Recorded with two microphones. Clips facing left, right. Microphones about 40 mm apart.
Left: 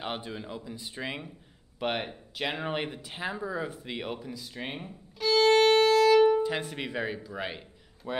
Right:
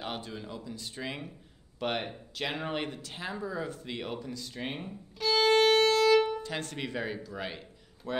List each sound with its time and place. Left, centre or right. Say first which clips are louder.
0.0 s speech: left 2 dB; centre
6.2 s speech: left 10 dB; centre